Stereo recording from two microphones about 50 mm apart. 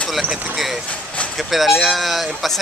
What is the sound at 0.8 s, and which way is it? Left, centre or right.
Vehicle, left.